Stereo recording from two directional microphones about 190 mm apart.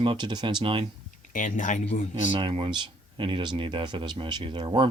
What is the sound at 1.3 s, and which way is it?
Speech, 45° left (ahead or behind).